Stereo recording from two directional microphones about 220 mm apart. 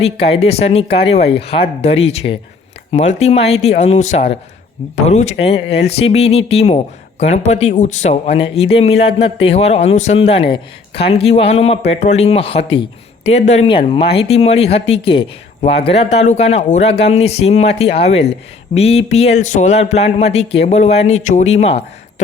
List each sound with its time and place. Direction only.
0.0 s speech: 25° left (ahead or behind)